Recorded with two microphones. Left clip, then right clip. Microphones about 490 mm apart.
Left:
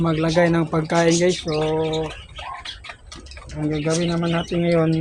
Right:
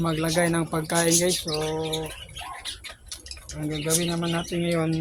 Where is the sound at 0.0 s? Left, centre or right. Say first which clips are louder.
Left 6 dB; right.